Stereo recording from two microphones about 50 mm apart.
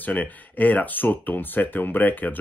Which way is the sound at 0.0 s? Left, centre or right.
Left.